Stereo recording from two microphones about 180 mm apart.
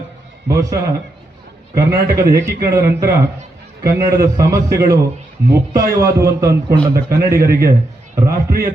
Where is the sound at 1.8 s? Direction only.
20° right (ahead or behind).